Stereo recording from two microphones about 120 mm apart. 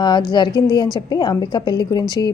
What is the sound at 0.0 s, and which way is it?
A woman's voice, 40° left (ahead or behind).